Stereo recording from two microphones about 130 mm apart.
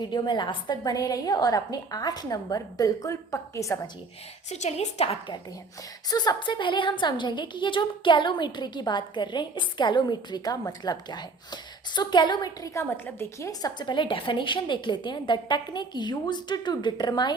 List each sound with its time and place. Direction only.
0.0 s a woman's voice: 35° left (ahead or behind)
4.4 s a woman's voice: 60° left (ahead or behind)
6.1 s a woman's voice: 30° left (ahead or behind)
13.5 s a woman's voice: 30° left (ahead or behind)